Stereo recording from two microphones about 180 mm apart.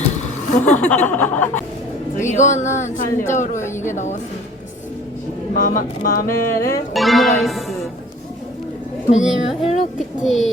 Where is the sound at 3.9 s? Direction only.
40° left (ahead or behind).